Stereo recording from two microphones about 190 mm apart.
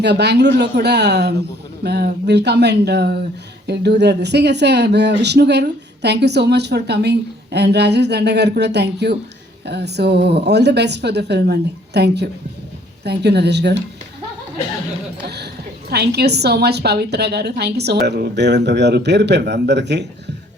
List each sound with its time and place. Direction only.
0.0 s speech: 60° right (ahead or behind)
15.9 s speech: 60° right (ahead or behind)